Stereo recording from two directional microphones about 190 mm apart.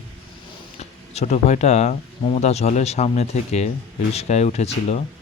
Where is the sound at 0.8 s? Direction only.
35° left (ahead or behind).